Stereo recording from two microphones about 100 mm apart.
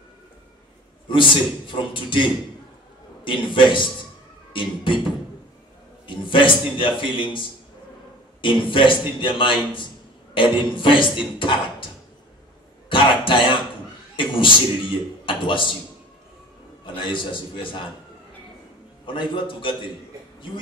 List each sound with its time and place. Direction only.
1.0 s a man's voice: 55° left (ahead or behind)
6.0 s a man's voice: 55° left (ahead or behind)
12.9 s a sound: 55° left (ahead or behind)
14.1 s a man's voice: 55° left (ahead or behind)
16.8 s a man's voice: 55° left (ahead or behind)
19.0 s a man's voice: 55° left (ahead or behind)